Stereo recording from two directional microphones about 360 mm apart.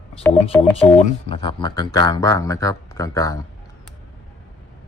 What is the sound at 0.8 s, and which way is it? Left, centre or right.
Speech, centre.